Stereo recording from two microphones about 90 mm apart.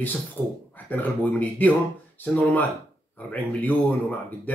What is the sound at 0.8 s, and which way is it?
Speech, 20° left (ahead or behind).